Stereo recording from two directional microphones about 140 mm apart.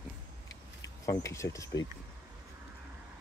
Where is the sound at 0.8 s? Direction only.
25° left (ahead or behind).